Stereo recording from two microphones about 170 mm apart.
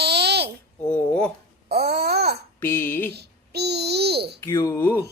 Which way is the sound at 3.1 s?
75° right (ahead or behind).